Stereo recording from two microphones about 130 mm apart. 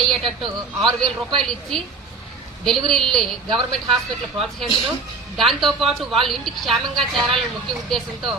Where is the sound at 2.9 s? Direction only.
5° left (ahead or behind).